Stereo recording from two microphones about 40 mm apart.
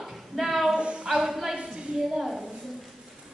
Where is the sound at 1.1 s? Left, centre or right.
Centre.